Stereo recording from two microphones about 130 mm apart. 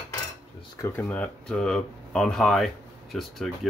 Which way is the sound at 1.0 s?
10° left (ahead or behind).